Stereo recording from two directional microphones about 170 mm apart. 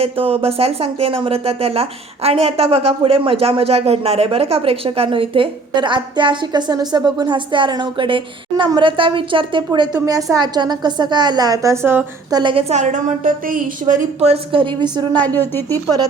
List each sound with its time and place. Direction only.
0.0 s speech: 35° right (ahead or behind); by 12.4 s 15° right (ahead or behind)
12.4 s a woman's voice: 30° right (ahead or behind)
15.4 s speech: 10° left (ahead or behind)